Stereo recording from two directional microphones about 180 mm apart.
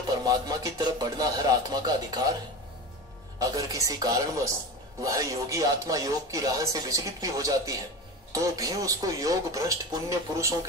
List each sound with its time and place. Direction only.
0.2 s music: 20° right (ahead or behind)
3.3 s speech: 20° right (ahead or behind)